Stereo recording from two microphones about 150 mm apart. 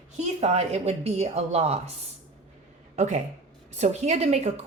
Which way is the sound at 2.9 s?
50° right (ahead or behind).